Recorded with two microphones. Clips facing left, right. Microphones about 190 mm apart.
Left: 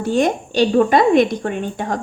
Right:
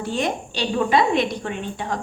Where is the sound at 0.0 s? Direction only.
45° left (ahead or behind).